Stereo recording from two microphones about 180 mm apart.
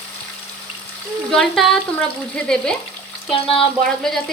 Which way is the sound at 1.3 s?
Centre (ahead or behind).